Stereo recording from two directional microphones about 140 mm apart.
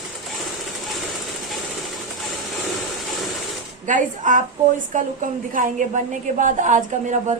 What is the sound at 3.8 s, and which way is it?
A woman's voice, 65° right (ahead or behind).